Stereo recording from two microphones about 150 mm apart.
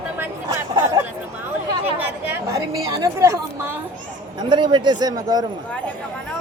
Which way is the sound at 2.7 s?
20° right (ahead or behind).